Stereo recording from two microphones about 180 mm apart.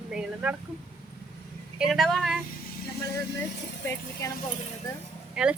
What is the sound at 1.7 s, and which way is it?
Speech, centre (ahead or behind).